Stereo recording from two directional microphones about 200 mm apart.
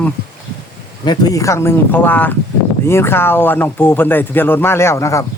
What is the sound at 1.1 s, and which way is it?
Speech, 20° left (ahead or behind).